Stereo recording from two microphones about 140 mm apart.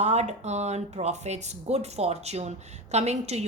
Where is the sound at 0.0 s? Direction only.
55° right (ahead or behind).